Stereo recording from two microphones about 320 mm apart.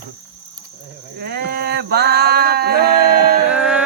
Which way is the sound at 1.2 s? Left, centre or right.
Right.